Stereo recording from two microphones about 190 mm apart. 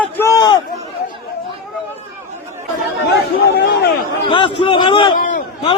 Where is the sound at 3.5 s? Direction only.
60° left (ahead or behind).